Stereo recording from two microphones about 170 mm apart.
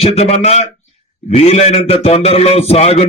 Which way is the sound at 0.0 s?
35° left (ahead or behind).